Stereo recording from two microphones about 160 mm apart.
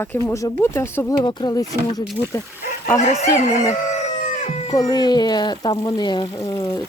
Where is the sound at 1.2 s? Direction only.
30° left (ahead or behind).